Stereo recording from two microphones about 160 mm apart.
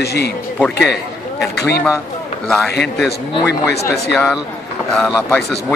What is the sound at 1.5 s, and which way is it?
Speech, 90° left.